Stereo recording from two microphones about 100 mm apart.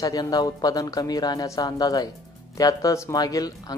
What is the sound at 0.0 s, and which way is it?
A woman's voice, 40° left (ahead or behind).